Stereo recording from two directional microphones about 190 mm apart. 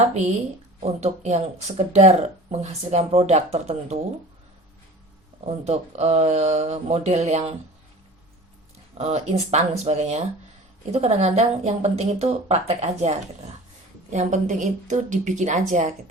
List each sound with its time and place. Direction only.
0.1 s speech: 35° right (ahead or behind)
5.5 s speech: 35° right (ahead or behind)
9.0 s speech: 35° right (ahead or behind)